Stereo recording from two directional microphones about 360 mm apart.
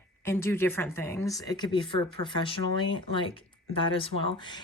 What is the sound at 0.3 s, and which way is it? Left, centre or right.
Speech, centre.